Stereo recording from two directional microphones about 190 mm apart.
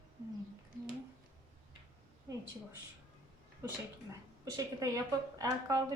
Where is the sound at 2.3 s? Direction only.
15° right (ahead or behind).